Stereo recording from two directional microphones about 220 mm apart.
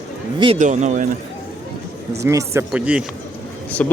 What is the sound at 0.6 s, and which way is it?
Speech, 35° right (ahead or behind).